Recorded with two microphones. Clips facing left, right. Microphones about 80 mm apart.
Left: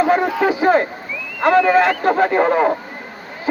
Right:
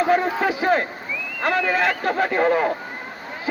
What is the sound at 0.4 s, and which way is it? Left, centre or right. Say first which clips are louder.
Speech: left 5 dB; centre.